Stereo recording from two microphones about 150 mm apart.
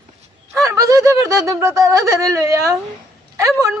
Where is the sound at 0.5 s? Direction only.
20° right (ahead or behind).